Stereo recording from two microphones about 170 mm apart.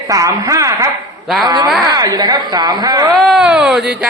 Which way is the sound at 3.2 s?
Centre (ahead or behind).